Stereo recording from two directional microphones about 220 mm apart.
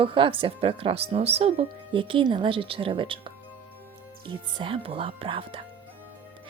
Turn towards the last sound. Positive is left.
turn(degrees=-25)  # may be behind; listen again after turning